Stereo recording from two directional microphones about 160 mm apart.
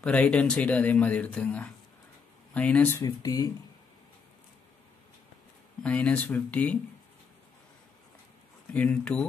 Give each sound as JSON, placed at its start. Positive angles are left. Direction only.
{"t": 0.0, "sound": "speech", "side_deg": 5}
{"t": 5.8, "sound": "speech", "side_deg": 10}
{"t": 8.7, "sound": "speech", "side_deg": 5}